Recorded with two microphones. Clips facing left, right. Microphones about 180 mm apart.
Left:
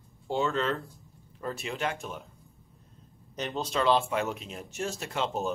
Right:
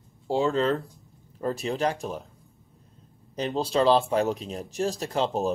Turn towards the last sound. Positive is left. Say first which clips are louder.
# right 5 dB
turn(degrees=-35)  # may be behind; listen again after turning